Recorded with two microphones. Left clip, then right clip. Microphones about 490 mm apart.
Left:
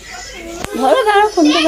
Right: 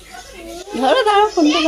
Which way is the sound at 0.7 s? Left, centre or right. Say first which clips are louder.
Left 2 dB; right.